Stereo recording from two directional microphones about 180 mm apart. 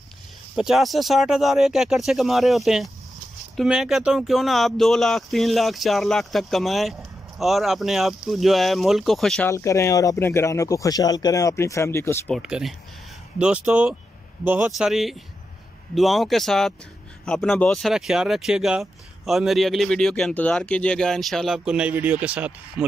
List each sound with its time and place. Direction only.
0.6 s speech: centre (ahead or behind)
9.5 s speech: 15° left (ahead or behind)
12.4 s speech: 5° right (ahead or behind)